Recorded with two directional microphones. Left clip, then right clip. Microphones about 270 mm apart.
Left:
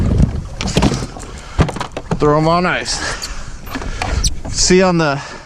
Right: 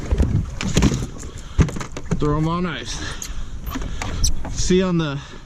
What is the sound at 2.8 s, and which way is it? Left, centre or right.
Speech, left.